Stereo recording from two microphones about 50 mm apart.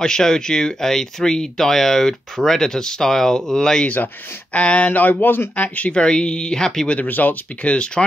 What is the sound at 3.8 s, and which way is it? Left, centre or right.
Speech, left.